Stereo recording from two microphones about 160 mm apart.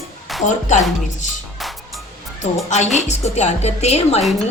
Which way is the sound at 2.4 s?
45° left (ahead or behind).